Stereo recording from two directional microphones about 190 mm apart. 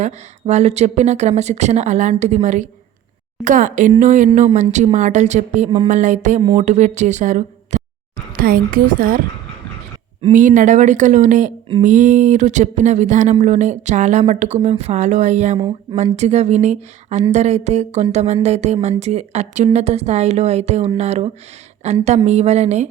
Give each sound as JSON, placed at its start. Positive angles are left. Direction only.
{"t": 0.0, "sound": "a woman's voice", "side_deg": -35}
{"t": 10.3, "sound": "speech", "side_deg": -40}
{"t": 15.5, "sound": "speech", "side_deg": -25}
{"t": 16.0, "sound": "speech", "side_deg": -35}